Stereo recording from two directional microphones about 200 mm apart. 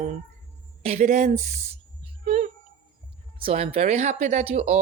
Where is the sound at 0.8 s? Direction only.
35° right (ahead or behind).